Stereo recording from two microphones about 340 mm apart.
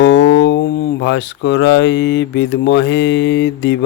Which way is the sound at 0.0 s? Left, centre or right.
Left.